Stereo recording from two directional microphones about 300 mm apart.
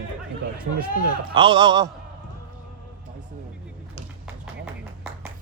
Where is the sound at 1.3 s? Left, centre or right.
Centre.